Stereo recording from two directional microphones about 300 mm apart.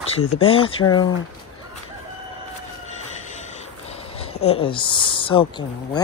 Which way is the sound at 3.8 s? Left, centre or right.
Centre.